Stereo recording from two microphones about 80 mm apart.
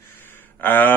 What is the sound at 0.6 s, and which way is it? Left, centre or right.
Speech, left.